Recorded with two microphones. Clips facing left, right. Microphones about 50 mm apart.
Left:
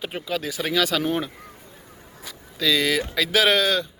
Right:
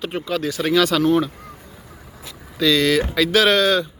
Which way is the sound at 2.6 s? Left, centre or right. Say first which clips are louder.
Right 5 dB; centre.